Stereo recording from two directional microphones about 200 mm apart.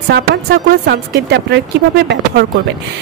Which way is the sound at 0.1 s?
55° right (ahead or behind).